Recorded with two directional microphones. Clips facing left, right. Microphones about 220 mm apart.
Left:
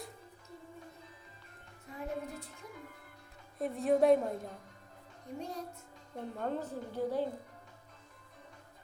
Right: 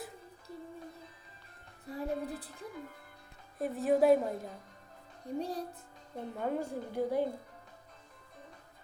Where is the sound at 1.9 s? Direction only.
35° right (ahead or behind).